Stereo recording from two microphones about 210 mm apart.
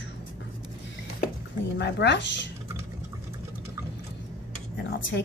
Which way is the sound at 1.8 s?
55° left (ahead or behind).